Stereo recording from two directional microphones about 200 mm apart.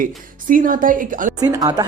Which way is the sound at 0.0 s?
45° right (ahead or behind).